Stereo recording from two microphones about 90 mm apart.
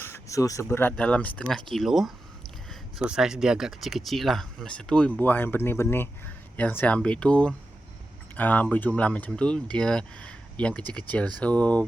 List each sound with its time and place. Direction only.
0.0 s a sound: 30° left (ahead or behind)
0.6 s speech: 25° left (ahead or behind)
5.2 s speech: 20° left (ahead or behind)